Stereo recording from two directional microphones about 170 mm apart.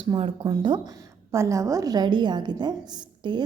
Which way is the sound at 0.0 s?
30° right (ahead or behind).